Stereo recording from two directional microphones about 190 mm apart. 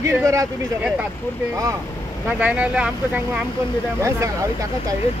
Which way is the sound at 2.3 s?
5° right (ahead or behind).